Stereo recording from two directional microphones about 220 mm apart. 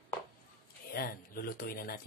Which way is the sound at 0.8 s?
45° left (ahead or behind).